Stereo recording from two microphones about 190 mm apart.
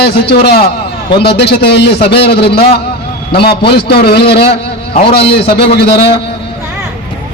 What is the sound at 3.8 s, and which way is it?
A man's voice, 60° left (ahead or behind).